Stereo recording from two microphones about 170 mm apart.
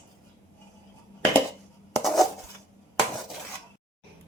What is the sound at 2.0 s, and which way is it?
Dishes, centre (ahead or behind).